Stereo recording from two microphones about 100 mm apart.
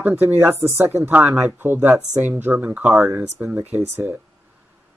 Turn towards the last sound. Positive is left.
turn(degrees=-20)  # may be behind; listen again after turning